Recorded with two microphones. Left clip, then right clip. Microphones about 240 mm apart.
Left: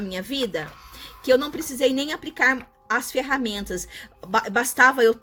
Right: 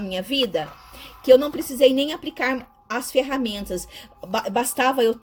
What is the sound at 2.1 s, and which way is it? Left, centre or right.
Speech, left.